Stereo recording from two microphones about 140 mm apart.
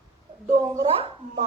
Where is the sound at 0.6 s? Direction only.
25° right (ahead or behind).